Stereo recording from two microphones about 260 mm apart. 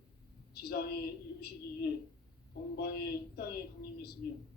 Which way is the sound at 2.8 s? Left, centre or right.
Left.